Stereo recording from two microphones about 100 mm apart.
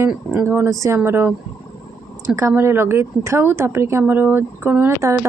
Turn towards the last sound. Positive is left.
turn(degrees=-25)  # may be behind; listen again after turning